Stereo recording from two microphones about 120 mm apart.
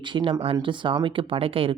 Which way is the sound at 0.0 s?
40° right (ahead or behind).